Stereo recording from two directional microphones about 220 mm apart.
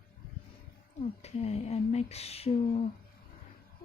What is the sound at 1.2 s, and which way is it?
Speech, 30° left (ahead or behind).